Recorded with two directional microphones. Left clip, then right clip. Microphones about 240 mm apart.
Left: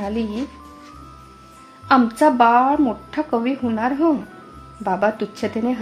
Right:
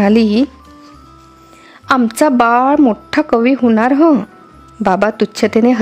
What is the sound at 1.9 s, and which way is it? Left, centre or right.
A woman's voice, right.